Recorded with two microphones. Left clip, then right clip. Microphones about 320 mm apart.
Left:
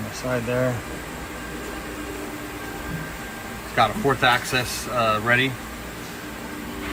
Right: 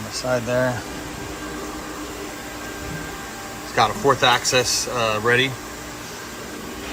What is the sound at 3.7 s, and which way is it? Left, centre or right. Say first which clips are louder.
A man's voice: right 2 dB; centre.